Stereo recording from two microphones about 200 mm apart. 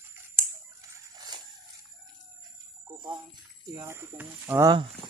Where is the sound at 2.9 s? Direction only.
20° right (ahead or behind).